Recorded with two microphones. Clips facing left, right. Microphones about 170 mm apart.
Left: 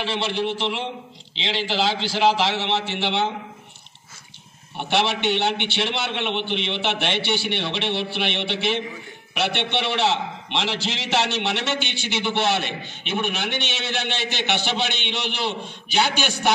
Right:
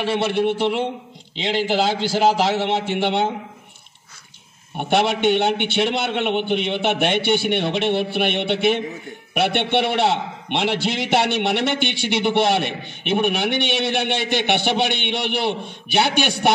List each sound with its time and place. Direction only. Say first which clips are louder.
0.0 s a man's voice: right 5 dB; 55° right (ahead or behind)
4.7 s a man's voice: right 4 dB; 50° right (ahead or behind)